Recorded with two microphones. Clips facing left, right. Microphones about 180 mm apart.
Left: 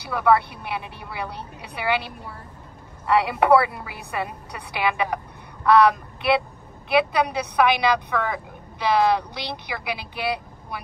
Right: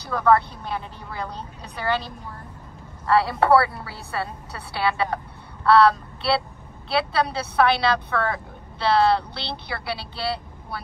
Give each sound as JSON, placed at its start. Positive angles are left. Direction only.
{"t": 0.0, "sound": "a woman's voice", "side_deg": 10}